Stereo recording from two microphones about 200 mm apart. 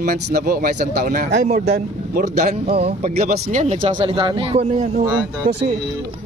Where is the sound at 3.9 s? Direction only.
25° right (ahead or behind).